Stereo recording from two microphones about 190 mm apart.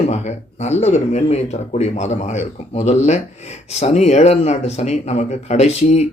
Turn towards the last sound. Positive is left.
turn(degrees=35)  # may be behind; listen again after turning